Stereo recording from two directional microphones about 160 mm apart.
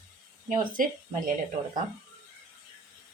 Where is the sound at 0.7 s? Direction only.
60° right (ahead or behind).